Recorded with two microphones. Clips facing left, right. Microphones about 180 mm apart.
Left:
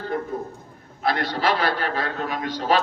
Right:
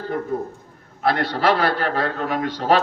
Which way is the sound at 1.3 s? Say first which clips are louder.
Right 3 dB; 60° right (ahead or behind).